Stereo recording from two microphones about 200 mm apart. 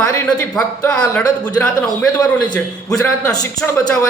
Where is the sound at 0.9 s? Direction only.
15° left (ahead or behind).